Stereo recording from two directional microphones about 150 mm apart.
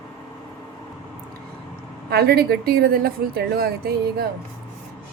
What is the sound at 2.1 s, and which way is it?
A woman's voice, 90° right.